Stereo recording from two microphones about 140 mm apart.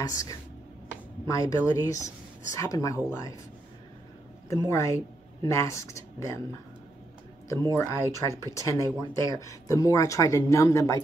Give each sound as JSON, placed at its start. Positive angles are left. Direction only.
{"t": 0.0, "sound": "speech", "side_deg": 25}
{"t": 4.5, "sound": "speech", "side_deg": 20}
{"t": 7.7, "sound": "speech", "side_deg": 20}